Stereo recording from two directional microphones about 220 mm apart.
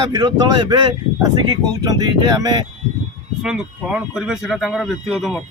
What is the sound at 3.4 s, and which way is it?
A man's voice, centre (ahead or behind).